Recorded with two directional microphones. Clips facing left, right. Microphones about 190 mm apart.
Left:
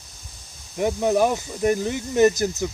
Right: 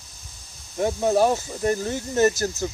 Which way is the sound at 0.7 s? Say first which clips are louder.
Even; 15° left (ahead or behind).